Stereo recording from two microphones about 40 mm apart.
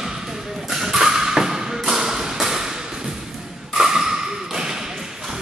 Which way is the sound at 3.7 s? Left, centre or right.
Centre.